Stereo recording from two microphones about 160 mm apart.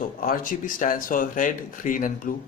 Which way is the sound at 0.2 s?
60° left (ahead or behind).